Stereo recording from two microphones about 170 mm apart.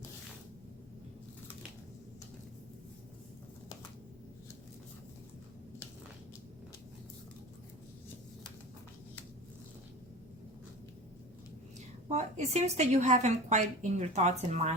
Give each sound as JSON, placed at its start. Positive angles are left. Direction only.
{"t": 12.0, "sound": "speech", "side_deg": -40}